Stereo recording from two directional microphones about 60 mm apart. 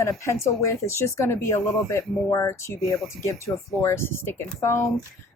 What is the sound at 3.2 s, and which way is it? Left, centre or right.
Speech, left.